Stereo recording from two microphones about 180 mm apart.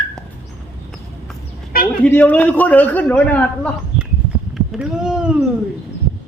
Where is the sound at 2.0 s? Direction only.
10° left (ahead or behind).